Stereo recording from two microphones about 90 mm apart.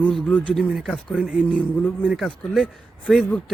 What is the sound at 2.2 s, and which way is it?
A man's voice, centre (ahead or behind).